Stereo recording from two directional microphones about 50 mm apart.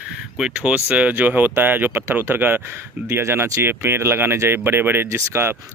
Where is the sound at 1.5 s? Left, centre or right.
Right.